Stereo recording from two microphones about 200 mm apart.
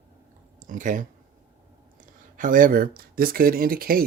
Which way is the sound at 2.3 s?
40° right (ahead or behind).